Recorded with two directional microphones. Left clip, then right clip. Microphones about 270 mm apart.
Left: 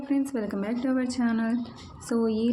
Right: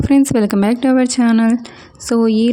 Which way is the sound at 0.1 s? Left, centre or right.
Right.